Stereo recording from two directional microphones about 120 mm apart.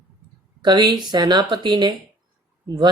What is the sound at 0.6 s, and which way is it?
Speech, 40° right (ahead or behind).